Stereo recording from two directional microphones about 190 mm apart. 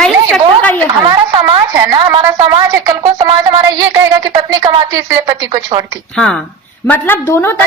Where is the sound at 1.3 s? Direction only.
25° right (ahead or behind).